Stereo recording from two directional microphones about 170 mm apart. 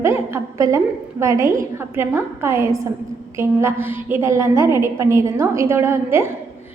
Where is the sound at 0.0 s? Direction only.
15° right (ahead or behind).